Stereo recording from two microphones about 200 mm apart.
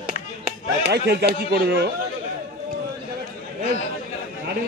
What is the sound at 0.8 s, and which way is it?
Speech, 55° right (ahead or behind).